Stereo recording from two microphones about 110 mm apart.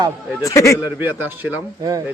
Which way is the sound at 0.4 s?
25° left (ahead or behind).